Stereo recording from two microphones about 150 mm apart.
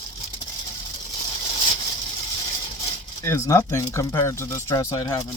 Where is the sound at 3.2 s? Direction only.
15° left (ahead or behind).